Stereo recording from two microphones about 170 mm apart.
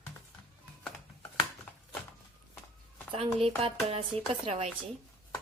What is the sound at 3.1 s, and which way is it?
A woman's voice, 35° right (ahead or behind).